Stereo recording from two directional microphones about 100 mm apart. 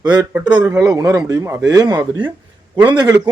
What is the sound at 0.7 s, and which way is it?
A man's voice, 35° right (ahead or behind).